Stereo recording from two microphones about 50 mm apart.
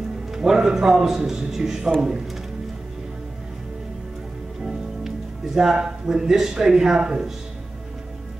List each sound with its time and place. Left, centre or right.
0.3 s a man's voice: centre
4.6 s speech: centre